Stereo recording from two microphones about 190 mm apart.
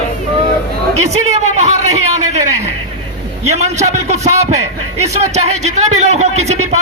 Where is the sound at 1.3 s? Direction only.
35° right (ahead or behind).